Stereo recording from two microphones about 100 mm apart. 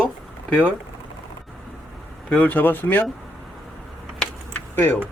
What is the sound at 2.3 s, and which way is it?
Speech, 15° left (ahead or behind).